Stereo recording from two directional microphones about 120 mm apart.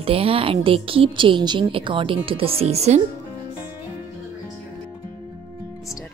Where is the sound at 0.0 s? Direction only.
50° right (ahead or behind).